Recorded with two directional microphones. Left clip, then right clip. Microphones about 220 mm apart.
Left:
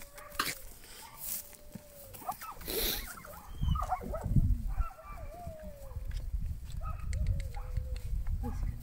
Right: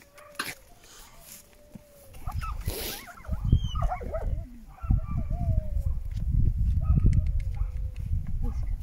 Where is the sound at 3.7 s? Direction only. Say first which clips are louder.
Right 1 dB; 45° right (ahead or behind).